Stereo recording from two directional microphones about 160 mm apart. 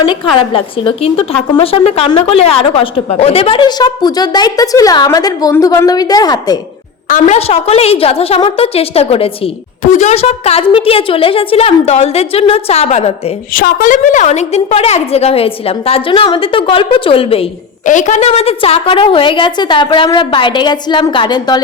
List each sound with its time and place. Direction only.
0.0 s a woman's voice: 30° left (ahead or behind)
7.1 s a woman's voice: 40° left (ahead or behind)
9.8 s a woman's voice: 50° left (ahead or behind)
13.5 s a woman's voice: 60° left (ahead or behind); by 17.4 s 35° left (ahead or behind)
17.8 s a woman's voice: 50° left (ahead or behind); by 21.6 s 25° left (ahead or behind)